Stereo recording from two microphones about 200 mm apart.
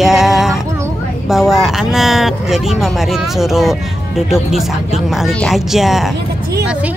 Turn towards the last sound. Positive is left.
turn(degrees=0)  # may be behind; listen again after turning